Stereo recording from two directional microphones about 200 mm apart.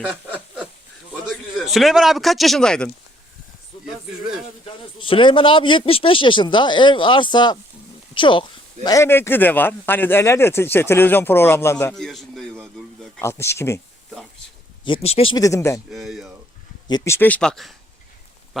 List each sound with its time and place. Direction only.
0.0 s speech: 5° right (ahead or behind)
0.3 s a sound: centre (ahead or behind)
1.3 s speech: centre (ahead or behind)
4.6 s speech: 25° left (ahead or behind); by 12.6 s centre (ahead or behind)
13.1 s speech: 10° left (ahead or behind)
14.8 s speech: 30° left (ahead or behind)
15.4 s speech: 15° left (ahead or behind)
15.9 s speech: centre (ahead or behind)
16.9 s speech: 15° left (ahead or behind)